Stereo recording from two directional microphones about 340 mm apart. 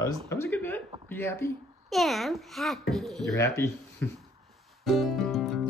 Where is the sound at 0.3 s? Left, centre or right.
Centre.